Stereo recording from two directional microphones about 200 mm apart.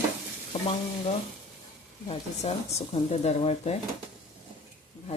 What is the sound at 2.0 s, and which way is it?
Speech, 30° left (ahead or behind).